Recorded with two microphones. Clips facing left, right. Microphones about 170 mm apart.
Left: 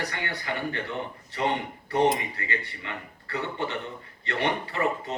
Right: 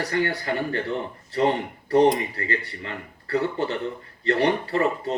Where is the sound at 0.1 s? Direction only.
40° right (ahead or behind).